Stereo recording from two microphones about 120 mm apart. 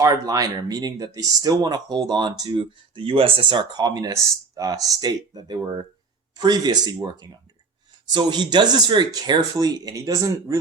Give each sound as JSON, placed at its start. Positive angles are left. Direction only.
{"t": 0.0, "sound": "speech", "side_deg": -30}